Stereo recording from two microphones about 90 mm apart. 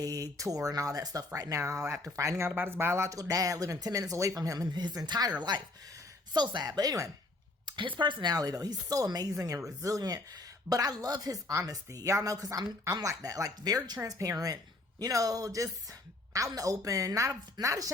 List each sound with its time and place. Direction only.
0.0 s speech: 40° right (ahead or behind)
7.6 s speech: 60° right (ahead or behind)
8.3 s speech: 45° right (ahead or behind)